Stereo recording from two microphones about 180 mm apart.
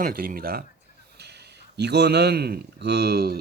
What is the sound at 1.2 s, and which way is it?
A man's voice, 65° right (ahead or behind).